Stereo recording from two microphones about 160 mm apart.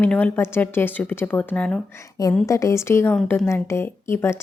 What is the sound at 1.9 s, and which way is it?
A woman's voice, 20° left (ahead or behind).